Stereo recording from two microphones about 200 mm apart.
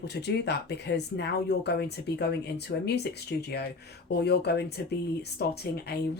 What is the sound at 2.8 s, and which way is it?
A woman's voice, 55° left (ahead or behind).